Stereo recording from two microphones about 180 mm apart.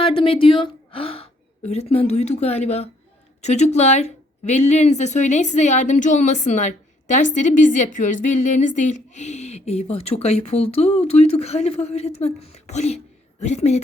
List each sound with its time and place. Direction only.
0.0 s a woman's voice: 30° left (ahead or behind)